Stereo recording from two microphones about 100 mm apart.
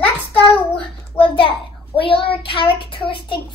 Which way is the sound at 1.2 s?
60° left (ahead or behind).